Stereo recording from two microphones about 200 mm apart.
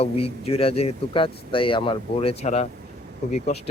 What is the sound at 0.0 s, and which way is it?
Speech, 30° left (ahead or behind).